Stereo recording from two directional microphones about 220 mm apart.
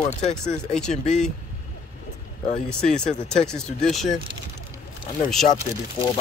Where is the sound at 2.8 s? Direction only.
35° left (ahead or behind).